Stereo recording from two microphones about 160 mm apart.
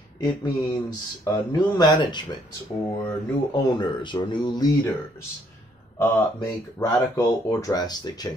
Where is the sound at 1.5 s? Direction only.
25° left (ahead or behind).